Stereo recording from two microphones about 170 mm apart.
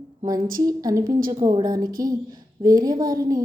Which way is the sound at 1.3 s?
20° right (ahead or behind).